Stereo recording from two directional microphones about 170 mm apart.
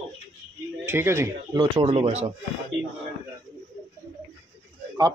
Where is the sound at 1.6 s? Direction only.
35° right (ahead or behind).